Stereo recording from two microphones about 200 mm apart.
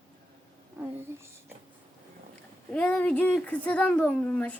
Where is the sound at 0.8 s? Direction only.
10° right (ahead or behind).